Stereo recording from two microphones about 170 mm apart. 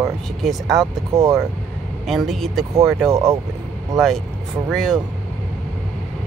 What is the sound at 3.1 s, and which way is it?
Speech, 20° right (ahead or behind).